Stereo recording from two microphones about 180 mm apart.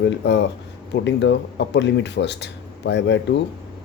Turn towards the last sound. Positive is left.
turn(degrees=70)  # may be behind; listen again after turning